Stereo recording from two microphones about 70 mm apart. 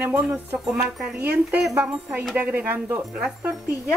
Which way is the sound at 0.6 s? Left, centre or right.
Centre.